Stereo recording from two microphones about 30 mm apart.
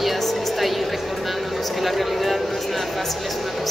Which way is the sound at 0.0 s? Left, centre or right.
Centre.